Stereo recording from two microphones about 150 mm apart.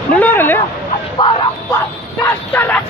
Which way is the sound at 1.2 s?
30° left (ahead or behind).